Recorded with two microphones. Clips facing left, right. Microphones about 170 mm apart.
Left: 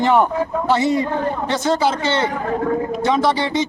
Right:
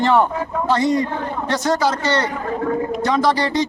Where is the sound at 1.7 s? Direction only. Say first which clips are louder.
Even; 25° left (ahead or behind).